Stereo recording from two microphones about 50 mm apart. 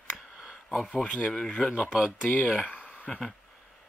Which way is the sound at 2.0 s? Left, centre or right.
Left.